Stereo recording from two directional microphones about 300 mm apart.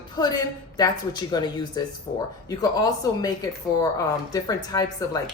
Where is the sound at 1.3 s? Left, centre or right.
Centre.